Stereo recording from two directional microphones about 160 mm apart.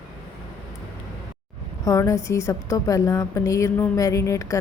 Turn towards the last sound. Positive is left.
turn(degrees=20)  # may be behind; listen again after turning